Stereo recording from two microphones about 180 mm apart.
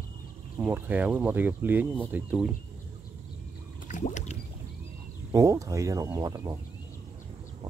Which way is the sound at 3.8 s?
45° left (ahead or behind).